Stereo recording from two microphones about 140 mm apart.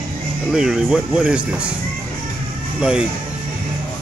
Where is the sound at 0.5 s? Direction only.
5° right (ahead or behind).